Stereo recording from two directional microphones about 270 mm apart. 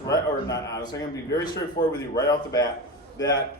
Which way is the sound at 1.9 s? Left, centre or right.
Centre.